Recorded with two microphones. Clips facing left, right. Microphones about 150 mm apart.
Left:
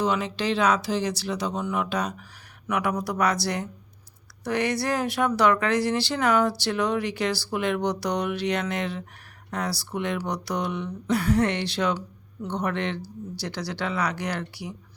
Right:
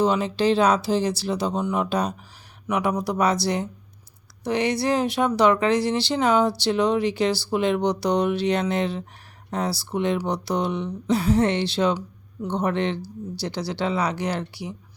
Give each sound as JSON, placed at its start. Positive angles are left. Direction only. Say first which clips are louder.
{"t": 0.0, "sound": "speech", "louder": "right 5 dB", "side_deg": -30}